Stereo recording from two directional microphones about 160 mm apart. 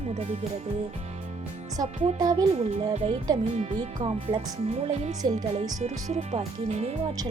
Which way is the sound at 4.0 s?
35° right (ahead or behind).